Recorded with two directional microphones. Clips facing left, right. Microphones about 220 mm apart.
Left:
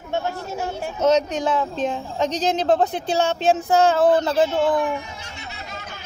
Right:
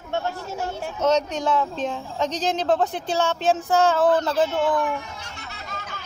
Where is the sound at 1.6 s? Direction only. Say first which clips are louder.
Left 2 dB; 20° left (ahead or behind).